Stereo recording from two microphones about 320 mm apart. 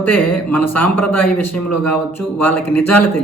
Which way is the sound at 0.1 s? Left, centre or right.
Centre.